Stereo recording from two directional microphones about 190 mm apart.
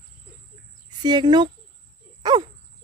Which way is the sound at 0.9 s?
20° right (ahead or behind).